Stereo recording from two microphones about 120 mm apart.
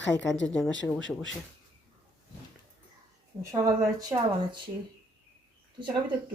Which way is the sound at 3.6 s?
30° right (ahead or behind).